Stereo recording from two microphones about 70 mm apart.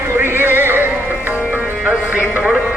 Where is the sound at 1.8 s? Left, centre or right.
Right.